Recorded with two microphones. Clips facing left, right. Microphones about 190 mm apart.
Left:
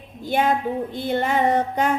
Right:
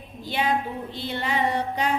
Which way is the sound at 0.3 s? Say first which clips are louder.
Left 5 dB; 50° left (ahead or behind).